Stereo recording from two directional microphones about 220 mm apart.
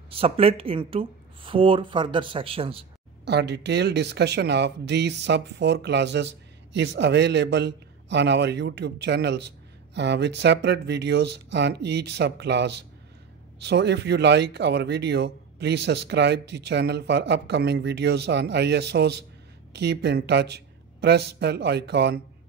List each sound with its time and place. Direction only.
0.1 s speech: 25° right (ahead or behind)
3.3 s speech: 50° right (ahead or behind)